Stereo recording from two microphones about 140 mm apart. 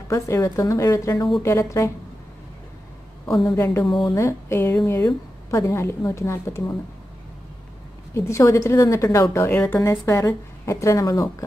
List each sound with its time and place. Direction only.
0.1 s a woman's voice: 20° left (ahead or behind)
3.4 s a woman's voice: 20° left (ahead or behind)
3.8 s speech: centre (ahead or behind)
4.1 s a woman's voice: 20° left (ahead or behind)
8.1 s a woman's voice: 20° left (ahead or behind)